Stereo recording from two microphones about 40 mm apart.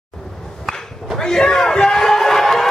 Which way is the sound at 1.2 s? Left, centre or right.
Centre.